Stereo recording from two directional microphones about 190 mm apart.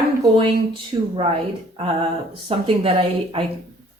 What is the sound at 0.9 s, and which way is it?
Speech, 25° right (ahead or behind).